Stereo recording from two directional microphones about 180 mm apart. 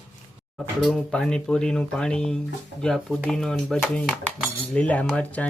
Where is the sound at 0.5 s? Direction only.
Centre (ahead or behind).